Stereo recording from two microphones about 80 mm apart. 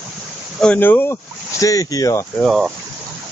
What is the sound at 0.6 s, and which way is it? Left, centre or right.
Speech, left.